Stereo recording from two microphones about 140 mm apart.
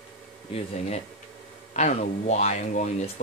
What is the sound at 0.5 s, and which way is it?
Speech, 50° left (ahead or behind).